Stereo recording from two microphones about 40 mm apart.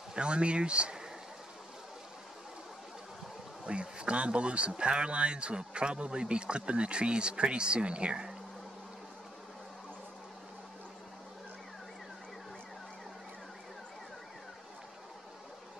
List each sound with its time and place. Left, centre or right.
0.1 s speech: right
3.6 s speech: right